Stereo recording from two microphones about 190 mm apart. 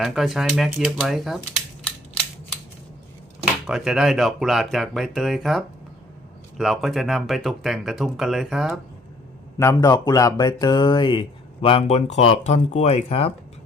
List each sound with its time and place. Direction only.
0.0 s speech: centre (ahead or behind)
3.7 s speech: 5° right (ahead or behind)
9.6 s speech: 15° left (ahead or behind); by 13.3 s 30° left (ahead or behind)